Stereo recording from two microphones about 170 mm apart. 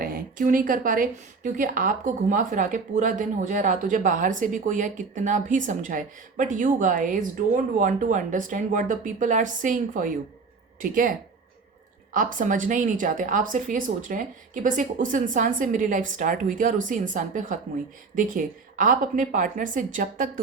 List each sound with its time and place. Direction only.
0.0 s a woman's voice: 55° right (ahead or behind)
12.1 s speech: 50° right (ahead or behind)